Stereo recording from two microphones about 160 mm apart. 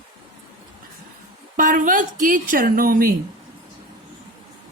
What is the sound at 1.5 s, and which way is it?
Speech, 60° right (ahead or behind).